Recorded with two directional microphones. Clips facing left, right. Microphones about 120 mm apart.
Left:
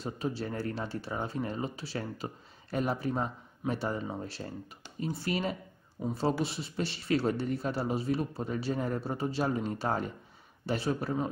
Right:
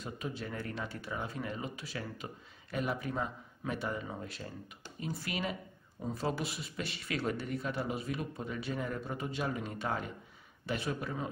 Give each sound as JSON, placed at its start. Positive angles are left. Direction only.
{"t": 0.0, "sound": "speech", "side_deg": 30}